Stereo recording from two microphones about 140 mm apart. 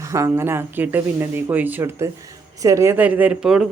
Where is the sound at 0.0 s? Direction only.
20° right (ahead or behind).